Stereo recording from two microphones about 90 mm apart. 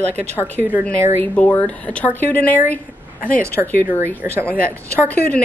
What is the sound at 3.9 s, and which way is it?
Speech, 20° right (ahead or behind).